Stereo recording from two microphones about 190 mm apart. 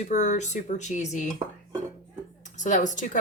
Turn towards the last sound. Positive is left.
turn(degrees=40)  # may be behind; listen again after turning